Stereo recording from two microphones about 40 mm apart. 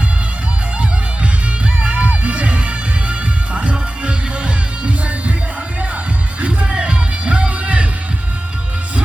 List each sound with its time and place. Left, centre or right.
1.8 s music: right
6.4 s music: right